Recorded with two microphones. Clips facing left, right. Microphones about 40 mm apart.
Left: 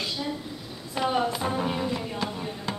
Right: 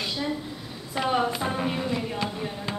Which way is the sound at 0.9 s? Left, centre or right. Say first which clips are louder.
Right 1 dB; centre.